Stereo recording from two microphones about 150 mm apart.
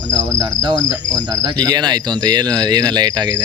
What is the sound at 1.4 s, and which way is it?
Speech, 30° right (ahead or behind).